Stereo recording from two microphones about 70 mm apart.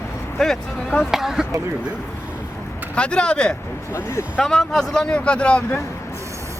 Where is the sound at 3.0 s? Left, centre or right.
Centre.